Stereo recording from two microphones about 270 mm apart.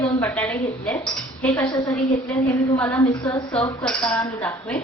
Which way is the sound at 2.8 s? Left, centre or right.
Centre.